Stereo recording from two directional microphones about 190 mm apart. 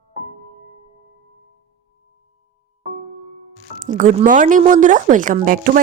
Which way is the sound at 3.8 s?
40° right (ahead or behind).